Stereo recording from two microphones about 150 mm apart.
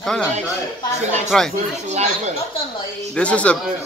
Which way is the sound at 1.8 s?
50° right (ahead or behind).